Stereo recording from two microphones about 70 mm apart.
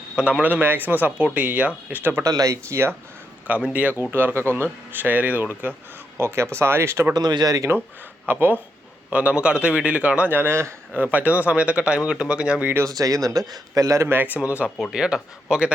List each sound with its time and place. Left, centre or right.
0.2 s speech: centre
0.4 s speech: right
2.2 s speech: right
3.4 s speech: right
4.1 s speech: right
6.1 s speech: right
7.1 s speech: right
8.3 s speech: right
9.0 s speech: centre
10.3 s speech: right
10.9 s speech: right
12.8 s speech: right
14.2 s speech: right